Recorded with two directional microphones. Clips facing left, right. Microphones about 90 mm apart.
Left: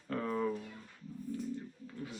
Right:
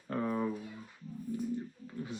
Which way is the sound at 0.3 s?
10° right (ahead or behind).